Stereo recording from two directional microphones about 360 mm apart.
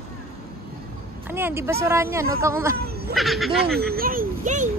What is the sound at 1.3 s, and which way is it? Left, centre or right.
Speech, centre.